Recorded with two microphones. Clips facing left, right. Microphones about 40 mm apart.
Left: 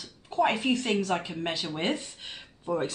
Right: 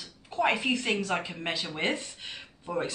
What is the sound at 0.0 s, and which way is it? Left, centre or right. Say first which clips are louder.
Speech: left 2 dB; centre.